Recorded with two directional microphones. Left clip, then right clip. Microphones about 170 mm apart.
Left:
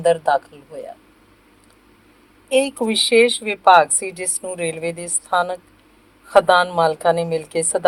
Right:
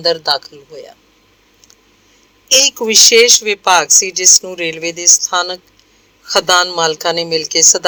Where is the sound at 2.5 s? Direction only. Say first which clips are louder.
Right 7 dB; 50° right (ahead or behind).